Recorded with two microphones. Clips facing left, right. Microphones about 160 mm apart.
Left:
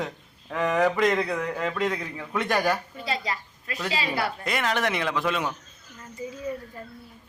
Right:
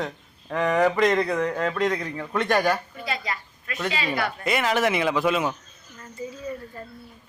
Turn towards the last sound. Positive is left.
turn(degrees=15)  # may be behind; listen again after turning